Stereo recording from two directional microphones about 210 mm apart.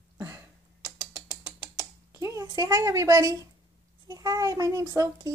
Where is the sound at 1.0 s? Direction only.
15° right (ahead or behind).